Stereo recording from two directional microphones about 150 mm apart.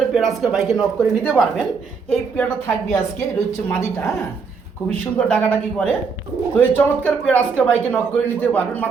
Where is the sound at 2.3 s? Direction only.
5° left (ahead or behind).